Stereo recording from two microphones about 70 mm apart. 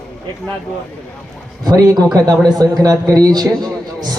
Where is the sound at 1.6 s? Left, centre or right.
Right.